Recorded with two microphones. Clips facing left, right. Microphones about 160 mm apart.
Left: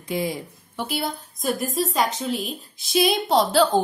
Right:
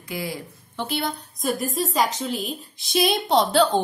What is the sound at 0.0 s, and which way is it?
Speech, 20° left (ahead or behind).